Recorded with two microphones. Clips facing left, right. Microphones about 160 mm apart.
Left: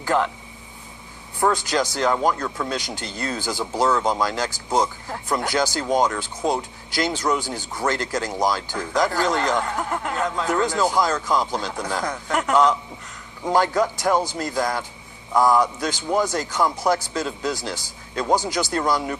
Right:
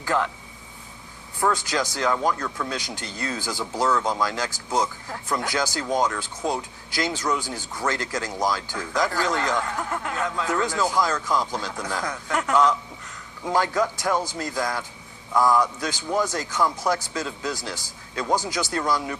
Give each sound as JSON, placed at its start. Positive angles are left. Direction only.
{"t": 0.0, "sound": "speech", "side_deg": 35}
{"t": 1.4, "sound": "speech", "side_deg": 35}
{"t": 18.3, "sound": "speech", "side_deg": 65}
{"t": 18.7, "sound": "speech", "side_deg": 35}